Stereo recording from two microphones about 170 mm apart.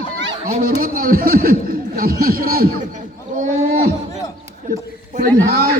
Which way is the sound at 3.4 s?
55° right (ahead or behind).